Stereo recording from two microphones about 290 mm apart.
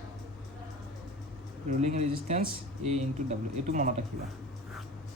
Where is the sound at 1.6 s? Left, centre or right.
Right.